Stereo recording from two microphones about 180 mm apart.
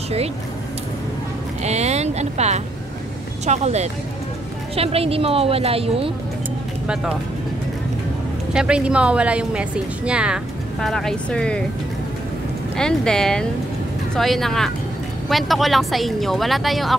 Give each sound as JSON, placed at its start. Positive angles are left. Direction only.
{"t": 1.6, "sound": "speech", "side_deg": -40}
{"t": 8.5, "sound": "a woman's voice", "side_deg": -5}
{"t": 12.7, "sound": "a woman's voice", "side_deg": 5}